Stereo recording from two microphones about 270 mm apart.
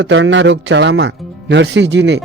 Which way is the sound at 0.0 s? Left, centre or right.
Right.